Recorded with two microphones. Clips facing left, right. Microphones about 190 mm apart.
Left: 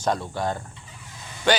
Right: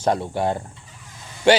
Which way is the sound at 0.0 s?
30° right (ahead or behind).